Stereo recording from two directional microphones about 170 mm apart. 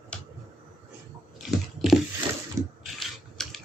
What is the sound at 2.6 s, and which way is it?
Ratchet, 15° right (ahead or behind).